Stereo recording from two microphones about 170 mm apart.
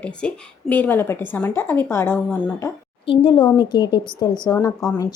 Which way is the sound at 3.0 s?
30° left (ahead or behind).